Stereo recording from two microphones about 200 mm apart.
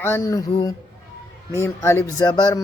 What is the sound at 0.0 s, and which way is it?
Mantra, 15° left (ahead or behind).